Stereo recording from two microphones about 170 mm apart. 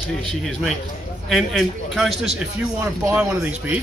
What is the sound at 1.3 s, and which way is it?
A man's voice, centre (ahead or behind).